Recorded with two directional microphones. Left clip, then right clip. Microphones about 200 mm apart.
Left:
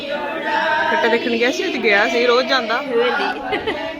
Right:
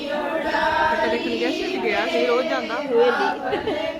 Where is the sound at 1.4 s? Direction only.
45° left (ahead or behind).